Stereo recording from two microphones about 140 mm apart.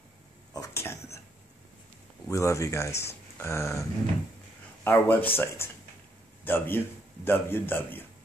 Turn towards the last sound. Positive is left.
turn(degrees=15)  # may be behind; listen again after turning